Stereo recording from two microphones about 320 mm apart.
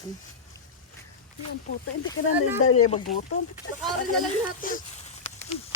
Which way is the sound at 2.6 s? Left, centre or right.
Left.